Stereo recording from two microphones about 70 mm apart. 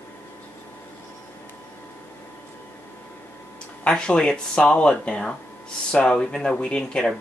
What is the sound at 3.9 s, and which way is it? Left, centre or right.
Speech, centre.